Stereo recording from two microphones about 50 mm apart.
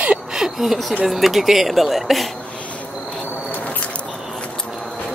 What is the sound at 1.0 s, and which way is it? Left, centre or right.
Speech, centre.